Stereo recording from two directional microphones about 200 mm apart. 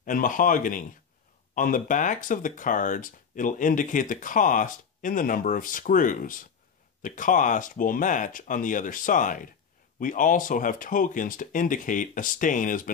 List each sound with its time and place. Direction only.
0.0 s speech: 40° left (ahead or behind)